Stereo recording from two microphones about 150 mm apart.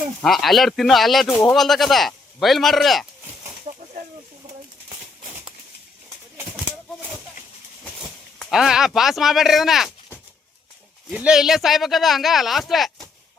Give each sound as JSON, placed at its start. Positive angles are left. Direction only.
{"t": 0.2, "sound": "speech", "side_deg": 0}
{"t": 3.7, "sound": "a sound", "side_deg": -50}
{"t": 8.0, "sound": "speech", "side_deg": -5}
{"t": 11.1, "sound": "speech", "side_deg": -5}